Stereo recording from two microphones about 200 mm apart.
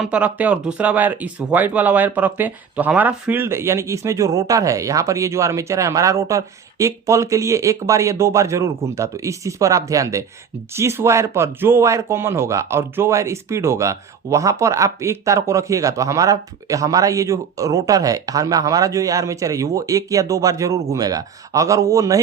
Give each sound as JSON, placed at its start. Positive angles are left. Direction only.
{"t": 0.0, "sound": "speech", "side_deg": -5}